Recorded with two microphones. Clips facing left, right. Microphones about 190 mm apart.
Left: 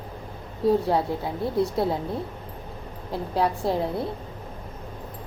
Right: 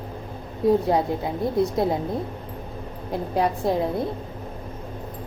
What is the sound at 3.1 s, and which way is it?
Speech, 20° right (ahead or behind).